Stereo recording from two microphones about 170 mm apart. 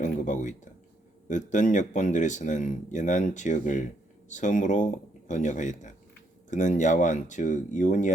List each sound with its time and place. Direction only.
0.0 s speech: 45° left (ahead or behind)